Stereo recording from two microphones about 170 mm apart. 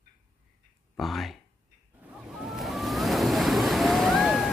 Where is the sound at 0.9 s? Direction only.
Centre (ahead or behind).